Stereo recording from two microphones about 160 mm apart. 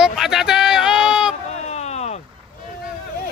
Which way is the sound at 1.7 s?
45° left (ahead or behind).